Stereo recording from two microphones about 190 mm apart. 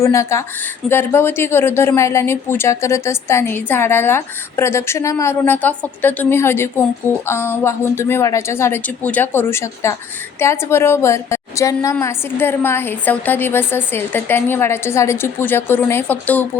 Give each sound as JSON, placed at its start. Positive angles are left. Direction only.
{"t": 0.0, "sound": "a woman's voice", "side_deg": 15}